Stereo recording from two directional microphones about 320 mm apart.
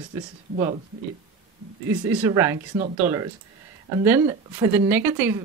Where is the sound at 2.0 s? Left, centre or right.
Centre.